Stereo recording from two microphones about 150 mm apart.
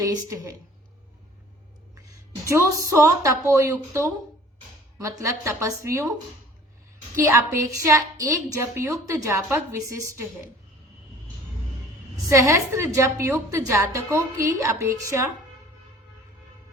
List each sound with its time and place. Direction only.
0.0 s a woman's voice: 20° right (ahead or behind)
2.4 s a woman's voice: 20° right (ahead or behind)
5.2 s a woman's voice: 20° right (ahead or behind)
7.2 s a woman's voice: 20° right (ahead or behind)
12.1 s a woman's voice: 20° right (ahead or behind)